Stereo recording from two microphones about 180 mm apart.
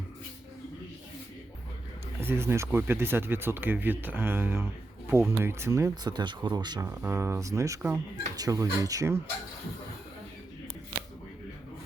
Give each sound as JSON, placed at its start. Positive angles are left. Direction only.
{"t": 2.2, "sound": "speech", "side_deg": -15}
{"t": 6.8, "sound": "speech", "side_deg": -15}